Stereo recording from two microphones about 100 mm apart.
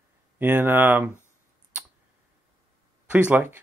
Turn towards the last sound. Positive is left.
turn(degrees=-20)  # may be behind; listen again after turning